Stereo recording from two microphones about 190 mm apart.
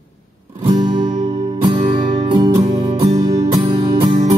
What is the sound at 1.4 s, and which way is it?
Music, 20° right (ahead or behind).